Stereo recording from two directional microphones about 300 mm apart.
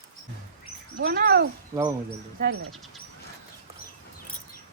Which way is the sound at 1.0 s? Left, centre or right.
Right.